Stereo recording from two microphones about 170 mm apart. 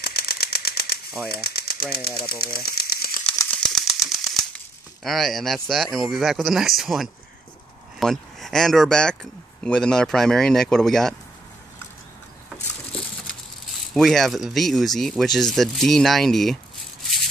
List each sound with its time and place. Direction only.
0.0 s a sound: 65° left (ahead or behind)
1.3 s speech: 65° left (ahead or behind)
3.6 s typewriter: centre (ahead or behind)
5.0 s speech: centre (ahead or behind)
13.9 s speech: centre (ahead or behind)